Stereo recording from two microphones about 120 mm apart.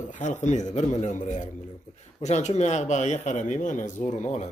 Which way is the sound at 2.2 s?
70° left (ahead or behind).